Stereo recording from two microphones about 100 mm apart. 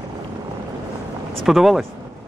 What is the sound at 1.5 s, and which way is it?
Speech, 5° right (ahead or behind).